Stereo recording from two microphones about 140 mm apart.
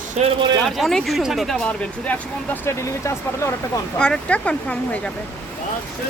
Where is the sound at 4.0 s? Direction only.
5° left (ahead or behind).